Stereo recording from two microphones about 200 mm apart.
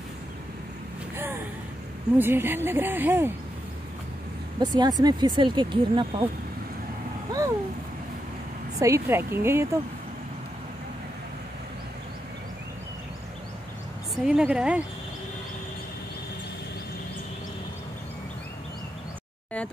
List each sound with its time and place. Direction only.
1.1 s a sound: 10° right (ahead or behind)
2.1 s speech: 10° right (ahead or behind)
4.6 s speech: 20° right (ahead or behind)
7.3 s a sound: 20° right (ahead or behind)
8.7 s speech: 15° right (ahead or behind)
14.1 s speech: 5° right (ahead or behind)